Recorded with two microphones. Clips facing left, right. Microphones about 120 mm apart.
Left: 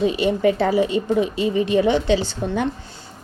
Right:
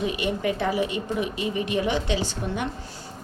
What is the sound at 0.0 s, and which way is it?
A woman's voice, 30° left (ahead or behind).